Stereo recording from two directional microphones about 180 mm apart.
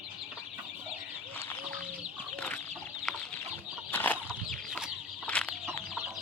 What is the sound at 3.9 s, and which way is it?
Bird flight, 10° left (ahead or behind).